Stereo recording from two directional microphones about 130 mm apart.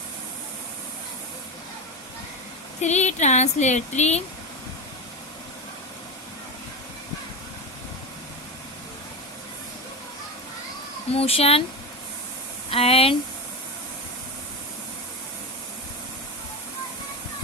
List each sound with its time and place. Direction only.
2.8 s a sound: 60° left (ahead or behind)
11.1 s speech: 50° left (ahead or behind)
12.7 s speech: 50° left (ahead or behind)